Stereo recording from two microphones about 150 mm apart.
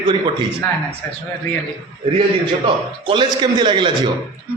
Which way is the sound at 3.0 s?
35° right (ahead or behind).